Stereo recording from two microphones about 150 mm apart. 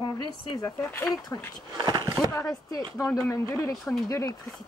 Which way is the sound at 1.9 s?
30° right (ahead or behind).